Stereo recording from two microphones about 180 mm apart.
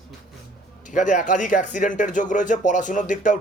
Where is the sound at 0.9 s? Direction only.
45° left (ahead or behind).